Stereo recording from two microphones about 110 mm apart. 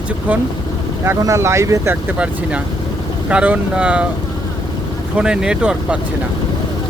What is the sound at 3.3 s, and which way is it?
Speech, 10° right (ahead or behind).